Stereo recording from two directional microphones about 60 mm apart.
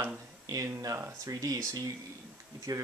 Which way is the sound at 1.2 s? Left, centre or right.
Right.